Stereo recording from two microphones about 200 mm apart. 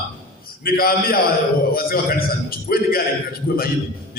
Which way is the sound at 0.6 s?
50° left (ahead or behind).